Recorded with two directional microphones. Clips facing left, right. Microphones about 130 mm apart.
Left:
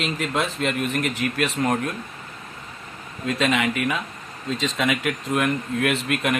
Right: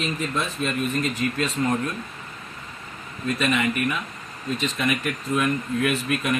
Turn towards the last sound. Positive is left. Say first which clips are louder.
# left 1 dB
turn(degrees=70)  # may be behind; listen again after turning